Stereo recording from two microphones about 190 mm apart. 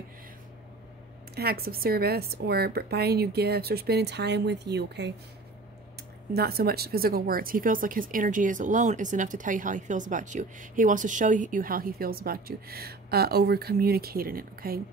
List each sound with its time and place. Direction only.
1.3 s speech: 55° right (ahead or behind)
6.3 s speech: 55° right (ahead or behind)